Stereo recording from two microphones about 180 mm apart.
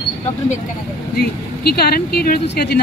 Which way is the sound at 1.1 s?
60° left (ahead or behind).